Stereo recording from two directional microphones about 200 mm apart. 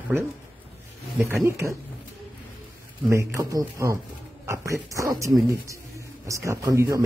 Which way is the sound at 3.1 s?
15° right (ahead or behind).